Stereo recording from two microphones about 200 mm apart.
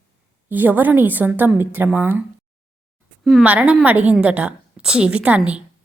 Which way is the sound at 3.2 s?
5° right (ahead or behind).